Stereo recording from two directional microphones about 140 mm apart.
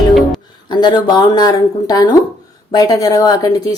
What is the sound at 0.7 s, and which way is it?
A woman's voice, 35° left (ahead or behind).